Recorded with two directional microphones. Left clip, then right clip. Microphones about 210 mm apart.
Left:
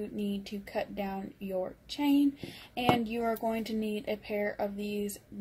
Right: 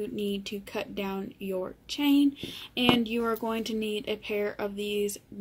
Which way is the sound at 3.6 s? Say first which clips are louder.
Right 3 dB; 55° right (ahead or behind).